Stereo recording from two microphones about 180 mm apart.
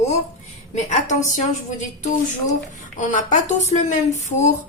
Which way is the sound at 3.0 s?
45° left (ahead or behind).